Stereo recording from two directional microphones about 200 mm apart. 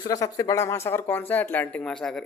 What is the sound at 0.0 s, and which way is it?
Speech, 20° left (ahead or behind).